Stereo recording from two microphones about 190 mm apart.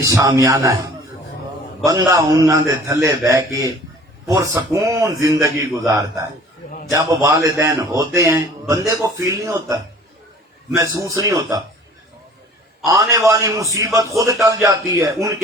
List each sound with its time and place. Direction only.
0.1 s a man's voice: 15° right (ahead or behind)
1.8 s a man's voice: 15° right (ahead or behind)
10.8 s a man's voice: 15° right (ahead or behind)
12.9 s a man's voice: 15° right (ahead or behind)